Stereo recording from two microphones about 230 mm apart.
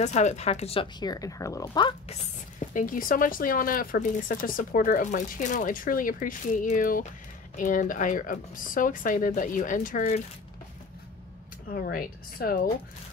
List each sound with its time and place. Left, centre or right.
0.0 s speech: left
2.6 s speech: left
11.7 s speech: left